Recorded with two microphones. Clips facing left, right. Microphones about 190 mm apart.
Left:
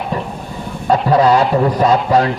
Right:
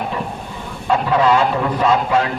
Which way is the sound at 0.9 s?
40° left (ahead or behind).